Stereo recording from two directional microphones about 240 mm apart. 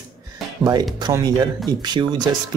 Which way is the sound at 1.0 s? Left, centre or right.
Centre.